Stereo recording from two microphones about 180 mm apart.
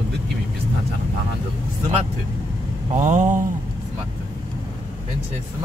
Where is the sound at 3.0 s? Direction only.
45° right (ahead or behind).